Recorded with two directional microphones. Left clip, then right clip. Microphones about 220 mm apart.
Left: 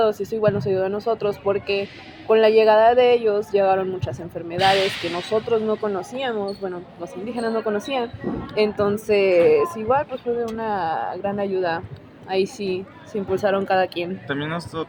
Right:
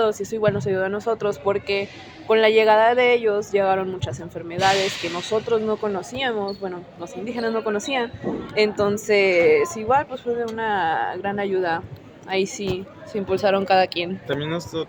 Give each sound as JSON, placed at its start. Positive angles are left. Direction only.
{"t": 0.0, "sound": "speech", "side_deg": -15}
{"t": 5.3, "sound": "a woman's voice", "side_deg": -15}
{"t": 14.3, "sound": "speech", "side_deg": -35}